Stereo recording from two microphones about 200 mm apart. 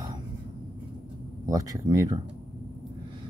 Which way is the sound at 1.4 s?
15° right (ahead or behind).